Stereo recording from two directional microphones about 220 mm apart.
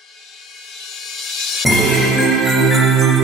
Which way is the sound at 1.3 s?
Centre (ahead or behind).